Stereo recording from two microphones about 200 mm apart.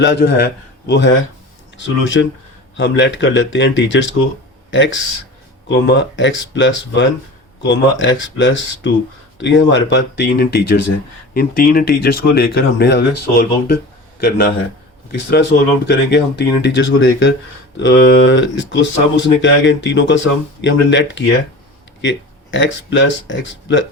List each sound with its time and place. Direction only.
0.0 s speech: 60° left (ahead or behind)
22.5 s speech: 65° left (ahead or behind)